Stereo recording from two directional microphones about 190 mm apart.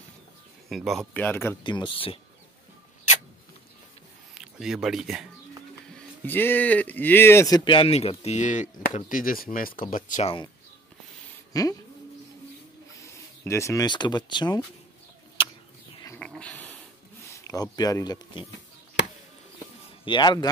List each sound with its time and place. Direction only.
0.7 s speech: centre (ahead or behind)
1.6 s speech: 25° left (ahead or behind)
4.4 s speech: 5° right (ahead or behind)
5.9 s speech: 10° left (ahead or behind); by 10.3 s 40° left (ahead or behind)
11.5 s speech: 20° left (ahead or behind)
13.0 s speech: 15° left (ahead or behind)
16.2 s a sound: 5° left (ahead or behind)
17.3 s speech: 15° left (ahead or behind)
20.1 s speech: 25° left (ahead or behind)